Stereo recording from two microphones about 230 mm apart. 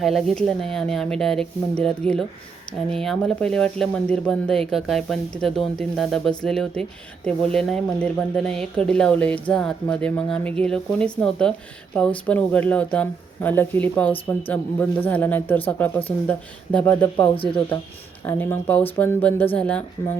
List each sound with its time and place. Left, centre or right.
0.0 s speech: centre
17.2 s speech: left
18.3 s speech: centre